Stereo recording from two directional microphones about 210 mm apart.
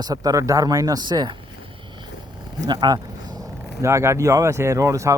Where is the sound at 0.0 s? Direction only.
15° right (ahead or behind).